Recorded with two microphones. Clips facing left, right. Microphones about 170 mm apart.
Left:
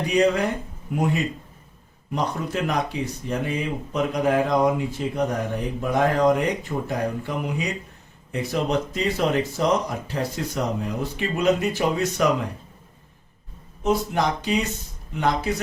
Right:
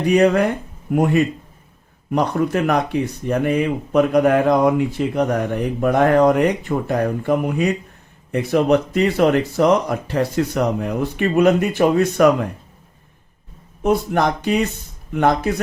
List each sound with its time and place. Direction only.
0.1 s a man's voice: 60° right (ahead or behind)
2.1 s speech: 60° right (ahead or behind)
13.8 s speech: 55° right (ahead or behind)